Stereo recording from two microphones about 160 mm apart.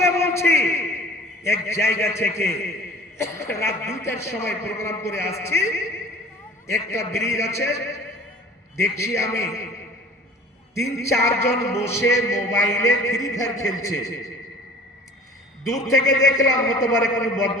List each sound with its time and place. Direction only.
0.0 s a sound: 15° left (ahead or behind)
1.5 s a man's voice: 15° left (ahead or behind)
10.8 s a man's voice: 20° left (ahead or behind)
16.0 s a man's voice: 20° left (ahead or behind)